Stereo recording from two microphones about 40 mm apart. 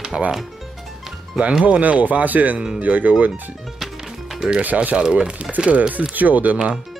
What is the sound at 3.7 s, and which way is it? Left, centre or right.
Music, centre.